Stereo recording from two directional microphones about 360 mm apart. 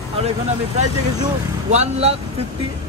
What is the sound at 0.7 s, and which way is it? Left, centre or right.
A man's voice, centre.